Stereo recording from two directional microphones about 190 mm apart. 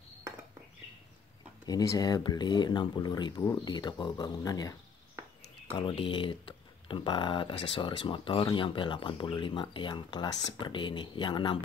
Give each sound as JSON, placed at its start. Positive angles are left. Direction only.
{"t": 1.7, "sound": "speech", "side_deg": 20}
{"t": 5.8, "sound": "speech", "side_deg": 25}